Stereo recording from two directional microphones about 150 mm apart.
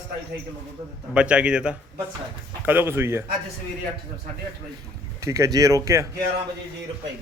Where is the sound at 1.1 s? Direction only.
5° right (ahead or behind).